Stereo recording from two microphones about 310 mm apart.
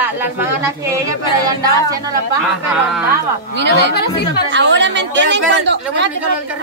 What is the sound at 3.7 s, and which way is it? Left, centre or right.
Speech, left.